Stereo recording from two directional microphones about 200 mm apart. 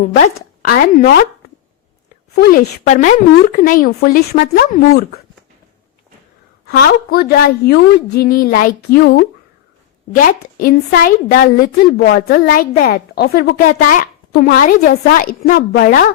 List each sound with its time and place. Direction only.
0.0 s a woman's voice: 45° left (ahead or behind)
2.3 s a woman's voice: 50° left (ahead or behind)
2.8 s a woman's voice: 35° left (ahead or behind)
6.7 s a woman's voice: 50° left (ahead or behind)